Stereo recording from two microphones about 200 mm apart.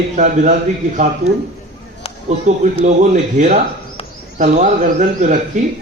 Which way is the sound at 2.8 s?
40° right (ahead or behind).